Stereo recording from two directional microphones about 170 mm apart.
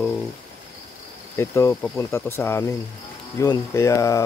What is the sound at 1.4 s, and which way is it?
Speech, 15° left (ahead or behind).